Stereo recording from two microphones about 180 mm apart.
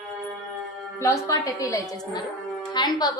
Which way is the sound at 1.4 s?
20° left (ahead or behind).